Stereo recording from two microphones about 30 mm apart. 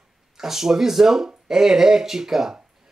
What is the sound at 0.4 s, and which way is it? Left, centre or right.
Speech, centre.